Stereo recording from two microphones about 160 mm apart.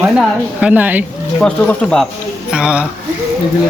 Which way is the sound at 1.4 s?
5° left (ahead or behind).